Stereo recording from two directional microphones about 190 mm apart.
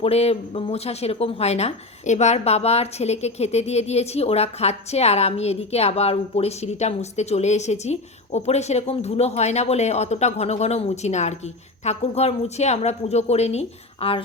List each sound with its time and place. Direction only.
0.0 s speech: 35° left (ahead or behind)